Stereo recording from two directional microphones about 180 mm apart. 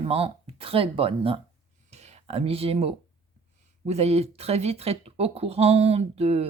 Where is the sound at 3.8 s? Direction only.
35° right (ahead or behind).